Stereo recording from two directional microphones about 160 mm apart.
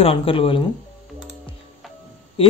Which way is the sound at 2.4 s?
35° left (ahead or behind).